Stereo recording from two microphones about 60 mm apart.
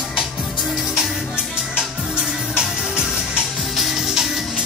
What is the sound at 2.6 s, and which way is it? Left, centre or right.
Music, centre.